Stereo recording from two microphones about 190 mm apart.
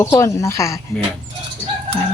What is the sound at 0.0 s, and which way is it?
Speech, 15° left (ahead or behind).